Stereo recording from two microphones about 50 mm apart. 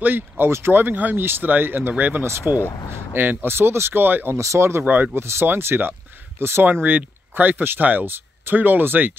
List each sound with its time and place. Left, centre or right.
0.0 s speech: right
0.5 s speech: right
2.2 s speech: right
4.0 s speech: right
4.3 s speech: right
4.8 s speech: right
5.1 s speech: right
6.6 s speech: right